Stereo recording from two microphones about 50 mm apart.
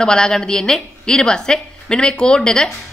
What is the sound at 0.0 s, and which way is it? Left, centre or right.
Speech, centre.